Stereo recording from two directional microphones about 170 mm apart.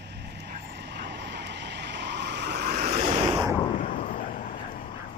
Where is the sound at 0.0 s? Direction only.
75° right (ahead or behind).